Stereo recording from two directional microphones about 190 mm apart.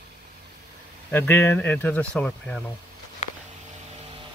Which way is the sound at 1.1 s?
10° left (ahead or behind).